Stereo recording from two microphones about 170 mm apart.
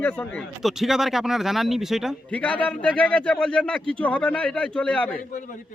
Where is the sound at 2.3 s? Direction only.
10° left (ahead or behind).